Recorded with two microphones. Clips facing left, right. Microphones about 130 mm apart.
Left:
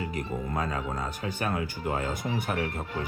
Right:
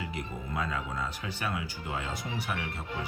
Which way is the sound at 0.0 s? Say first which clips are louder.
Left 5 dB; 45° left (ahead or behind).